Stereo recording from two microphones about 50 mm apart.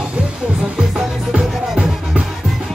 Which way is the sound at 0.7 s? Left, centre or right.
Right.